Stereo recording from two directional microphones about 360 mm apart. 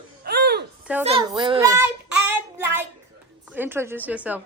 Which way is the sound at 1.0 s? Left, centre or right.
Centre.